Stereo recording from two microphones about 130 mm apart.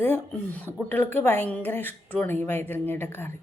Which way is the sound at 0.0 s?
15° left (ahead or behind).